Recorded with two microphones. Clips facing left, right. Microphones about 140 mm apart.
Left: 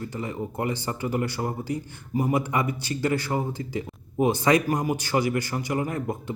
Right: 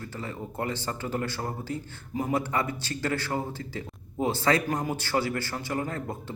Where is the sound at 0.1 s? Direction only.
15° left (ahead or behind).